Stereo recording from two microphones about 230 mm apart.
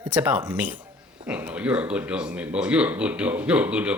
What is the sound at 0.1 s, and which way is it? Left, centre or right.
Speech, centre.